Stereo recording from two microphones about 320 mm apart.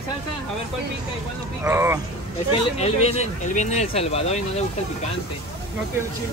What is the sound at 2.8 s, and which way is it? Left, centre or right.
Speech, centre.